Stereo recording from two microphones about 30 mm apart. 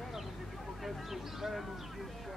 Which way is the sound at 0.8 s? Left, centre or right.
Centre.